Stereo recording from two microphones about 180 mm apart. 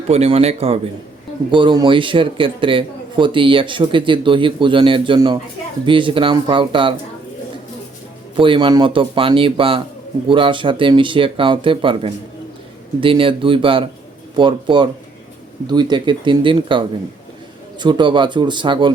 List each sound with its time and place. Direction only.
0.1 s a man's voice: 35° right (ahead or behind)
8.4 s speech: 30° right (ahead or behind)